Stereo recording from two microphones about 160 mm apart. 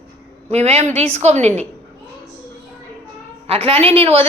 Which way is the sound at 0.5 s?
40° right (ahead or behind).